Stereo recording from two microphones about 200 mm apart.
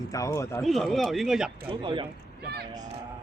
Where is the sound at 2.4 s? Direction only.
55° right (ahead or behind).